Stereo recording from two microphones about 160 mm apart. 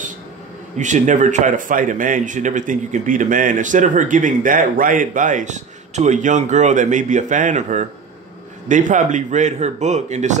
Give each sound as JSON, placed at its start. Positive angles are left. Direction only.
{"t": 0.7, "sound": "speech", "side_deg": -50}